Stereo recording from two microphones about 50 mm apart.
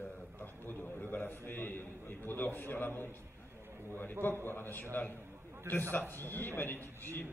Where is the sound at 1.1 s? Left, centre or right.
Left.